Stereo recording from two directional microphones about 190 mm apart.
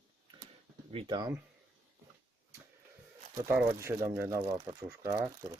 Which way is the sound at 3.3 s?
15° right (ahead or behind).